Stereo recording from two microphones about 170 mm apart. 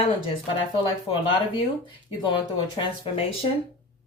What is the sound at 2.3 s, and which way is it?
Speech, 30° left (ahead or behind).